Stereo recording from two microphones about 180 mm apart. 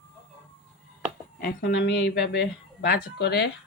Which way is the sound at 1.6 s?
75° left (ahead or behind).